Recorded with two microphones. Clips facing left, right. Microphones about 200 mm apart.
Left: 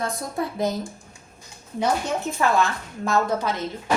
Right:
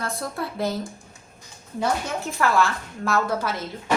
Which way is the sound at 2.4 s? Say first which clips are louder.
Right 1 dB; 20° left (ahead or behind).